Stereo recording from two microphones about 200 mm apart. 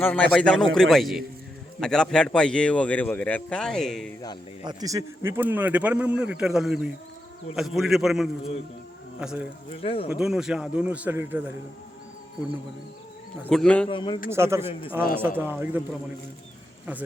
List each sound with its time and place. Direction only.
0.0 s a man's voice: 5° left (ahead or behind)
4.6 s a man's voice: 15° right (ahead or behind)
9.8 s a man's voice: 30° left (ahead or behind)
10.1 s a man's voice: 5° right (ahead or behind)
13.5 s a man's voice: 5° left (ahead or behind)
13.8 s a man's voice: 25° left (ahead or behind)
14.3 s speech: 15° right (ahead or behind)
14.7 s a man's voice: 25° left (ahead or behind)
15.4 s speech: 10° right (ahead or behind)